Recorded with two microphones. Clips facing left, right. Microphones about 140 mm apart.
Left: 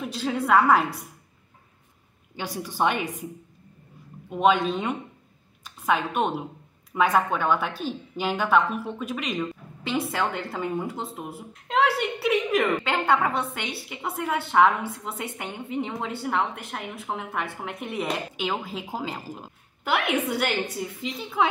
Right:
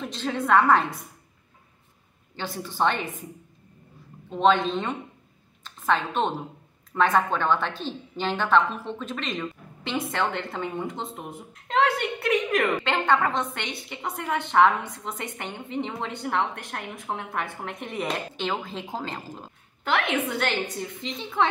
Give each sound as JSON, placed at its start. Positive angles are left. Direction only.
{"t": 0.0, "sound": "a woman's voice", "side_deg": 5}
{"t": 2.3, "sound": "a woman's voice", "side_deg": 10}
{"t": 4.3, "sound": "a woman's voice", "side_deg": 10}